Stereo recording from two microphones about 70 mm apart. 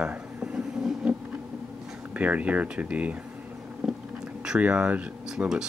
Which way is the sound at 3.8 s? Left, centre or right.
Centre.